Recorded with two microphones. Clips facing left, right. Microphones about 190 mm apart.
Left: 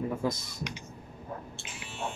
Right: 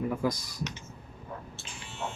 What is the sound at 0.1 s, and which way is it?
Speech, 25° left (ahead or behind).